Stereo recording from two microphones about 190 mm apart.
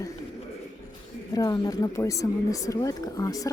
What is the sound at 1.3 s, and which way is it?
A woman's voice, 20° left (ahead or behind).